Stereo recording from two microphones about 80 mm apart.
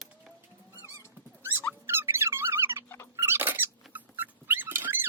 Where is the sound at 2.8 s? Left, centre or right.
Left.